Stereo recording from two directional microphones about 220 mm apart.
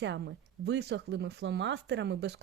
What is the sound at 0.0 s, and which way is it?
Speech, 50° right (ahead or behind).